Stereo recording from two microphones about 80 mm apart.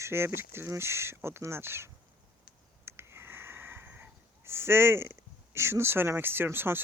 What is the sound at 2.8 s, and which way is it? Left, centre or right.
Wheeze, right.